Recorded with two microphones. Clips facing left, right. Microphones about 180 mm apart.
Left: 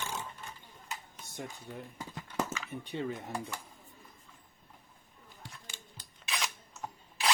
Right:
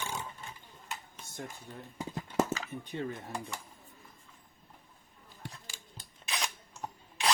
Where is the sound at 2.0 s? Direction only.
25° right (ahead or behind).